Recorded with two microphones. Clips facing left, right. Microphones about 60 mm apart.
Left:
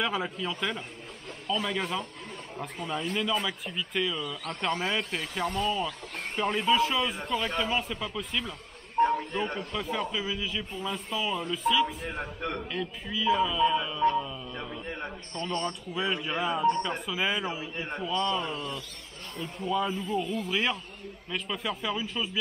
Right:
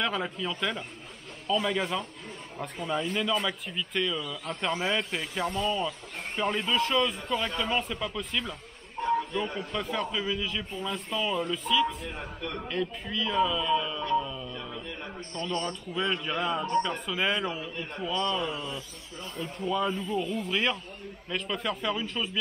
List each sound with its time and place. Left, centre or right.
0.0 s a man's voice: centre
5.2 s speech: centre
5.6 s a man's voice: centre
9.0 s a sound: left
9.6 s a man's voice: centre
14.5 s a sound: left
14.9 s a man's voice: left
15.9 s a man's voice: centre
18.4 s a man's voice: centre